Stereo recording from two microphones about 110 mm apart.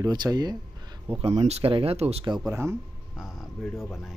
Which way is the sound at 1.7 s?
65° right (ahead or behind).